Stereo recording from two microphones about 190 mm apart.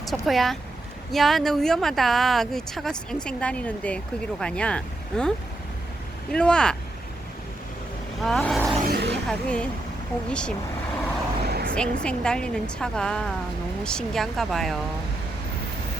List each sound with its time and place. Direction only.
0.0 s speech: centre (ahead or behind)
6.3 s speech: 5° left (ahead or behind)
8.2 s speech: centre (ahead or behind)
8.8 s vehicle: 60° right (ahead or behind)
9.2 s speech: 5° left (ahead or behind)
11.4 s vehicle: 55° right (ahead or behind)
11.7 s speech: 5° left (ahead or behind)